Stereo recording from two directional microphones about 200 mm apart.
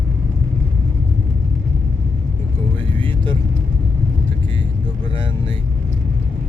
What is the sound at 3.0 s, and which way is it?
Vehicle, 25° right (ahead or behind).